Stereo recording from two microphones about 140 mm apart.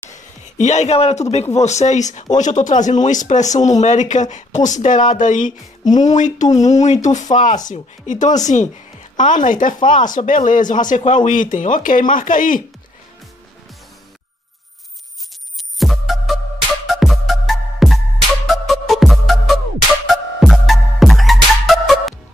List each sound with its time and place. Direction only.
0.1 s speech: 55° left (ahead or behind)
5.9 s speech: 30° left (ahead or behind)
6.1 s speech: 60° left (ahead or behind)
15.8 s music: centre (ahead or behind)